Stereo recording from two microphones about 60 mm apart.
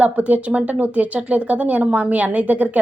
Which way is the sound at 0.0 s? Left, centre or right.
Right.